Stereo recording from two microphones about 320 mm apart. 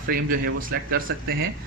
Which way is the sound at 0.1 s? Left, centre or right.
Right.